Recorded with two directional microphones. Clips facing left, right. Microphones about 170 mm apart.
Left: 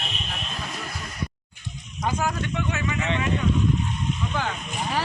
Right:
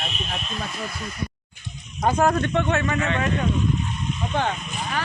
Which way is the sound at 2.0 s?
55° right (ahead or behind).